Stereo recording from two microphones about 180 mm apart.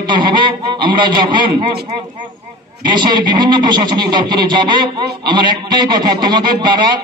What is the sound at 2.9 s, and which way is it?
Speech, 25° right (ahead or behind).